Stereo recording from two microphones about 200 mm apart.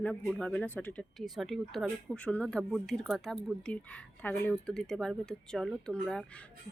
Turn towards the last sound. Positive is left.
turn(degrees=5)  # may be behind; listen again after turning